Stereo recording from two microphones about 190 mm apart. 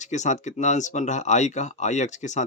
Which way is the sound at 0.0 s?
40° left (ahead or behind).